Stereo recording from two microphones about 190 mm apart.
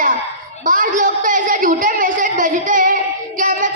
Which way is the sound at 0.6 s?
45° right (ahead or behind).